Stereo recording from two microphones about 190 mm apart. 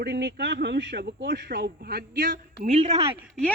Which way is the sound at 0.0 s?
60° right (ahead or behind).